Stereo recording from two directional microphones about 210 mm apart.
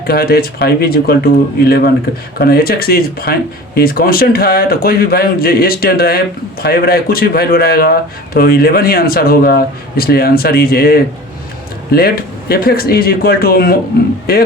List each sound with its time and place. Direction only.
0.1 s speech: 45° left (ahead or behind)